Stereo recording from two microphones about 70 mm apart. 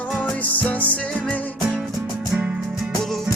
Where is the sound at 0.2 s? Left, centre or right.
Left.